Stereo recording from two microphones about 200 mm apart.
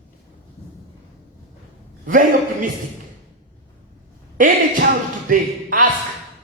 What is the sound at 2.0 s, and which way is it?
Speech, 45° right (ahead or behind).